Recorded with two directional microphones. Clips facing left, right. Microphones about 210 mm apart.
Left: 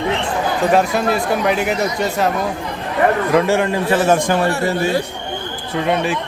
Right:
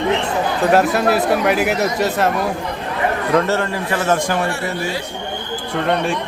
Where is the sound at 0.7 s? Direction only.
Centre (ahead or behind).